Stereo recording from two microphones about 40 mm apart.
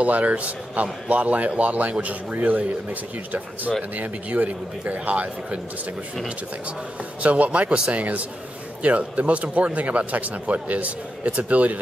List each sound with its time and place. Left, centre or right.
0.0 s speech: right
7.2 s speech: right